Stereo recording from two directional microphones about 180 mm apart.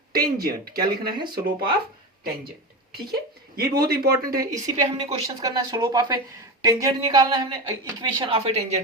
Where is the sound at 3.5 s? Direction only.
60° right (ahead or behind).